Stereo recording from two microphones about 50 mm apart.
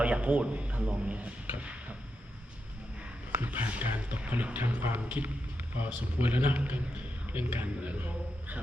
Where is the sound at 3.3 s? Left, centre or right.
Right.